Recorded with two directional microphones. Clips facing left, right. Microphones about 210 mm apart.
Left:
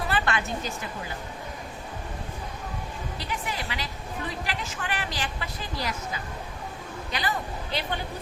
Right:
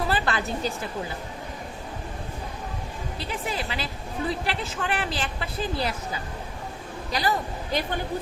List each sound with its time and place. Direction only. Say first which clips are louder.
0.1 s a sound: right 1 dB; 35° right (ahead or behind)
3.2 s a woman's voice: right 4 dB; 30° right (ahead or behind)
7.1 s a woman's voice: right 4 dB; 40° right (ahead or behind)